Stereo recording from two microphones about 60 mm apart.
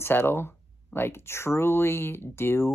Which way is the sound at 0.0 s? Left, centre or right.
Left.